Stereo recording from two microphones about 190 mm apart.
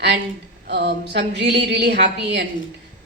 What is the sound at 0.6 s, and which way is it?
Speech, 60° right (ahead or behind).